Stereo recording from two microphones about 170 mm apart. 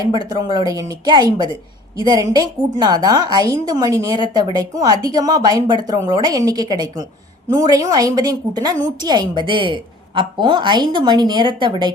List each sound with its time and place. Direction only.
0.1 s a woman's voice: 25° right (ahead or behind)